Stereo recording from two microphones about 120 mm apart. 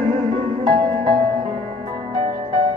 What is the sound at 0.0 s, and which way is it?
Music, 45° right (ahead or behind).